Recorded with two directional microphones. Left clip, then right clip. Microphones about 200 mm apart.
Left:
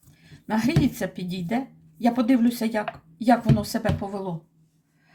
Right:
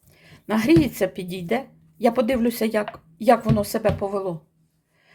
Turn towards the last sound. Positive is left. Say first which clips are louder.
# right 6 dB
turn(degrees=-40)  # may be behind; listen again after turning